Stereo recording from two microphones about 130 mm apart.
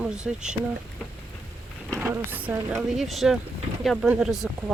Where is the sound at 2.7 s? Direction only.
5° right (ahead or behind).